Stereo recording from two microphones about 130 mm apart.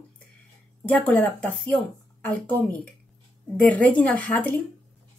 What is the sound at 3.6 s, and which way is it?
Speech, 10° left (ahead or behind).